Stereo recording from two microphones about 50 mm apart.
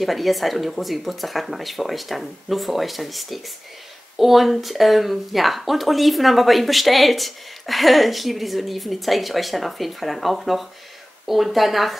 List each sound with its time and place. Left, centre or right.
0.0 s speech: centre